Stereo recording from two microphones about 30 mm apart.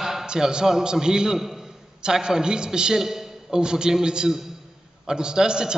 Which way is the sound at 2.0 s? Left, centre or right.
Right.